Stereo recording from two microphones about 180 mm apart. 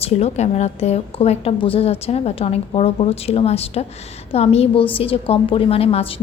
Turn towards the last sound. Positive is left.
turn(degrees=35)  # may be behind; listen again after turning